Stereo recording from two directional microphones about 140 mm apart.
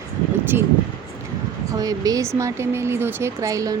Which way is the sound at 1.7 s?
25° right (ahead or behind).